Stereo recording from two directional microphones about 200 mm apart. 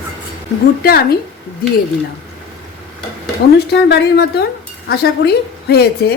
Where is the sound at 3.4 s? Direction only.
55° left (ahead or behind).